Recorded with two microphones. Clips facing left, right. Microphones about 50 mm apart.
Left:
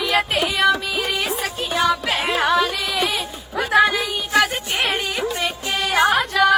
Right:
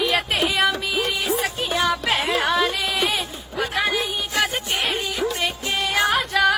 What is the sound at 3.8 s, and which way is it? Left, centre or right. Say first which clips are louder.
Music: left 2 dB; left.